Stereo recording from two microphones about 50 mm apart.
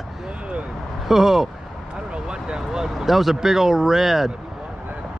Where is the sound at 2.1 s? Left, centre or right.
Centre.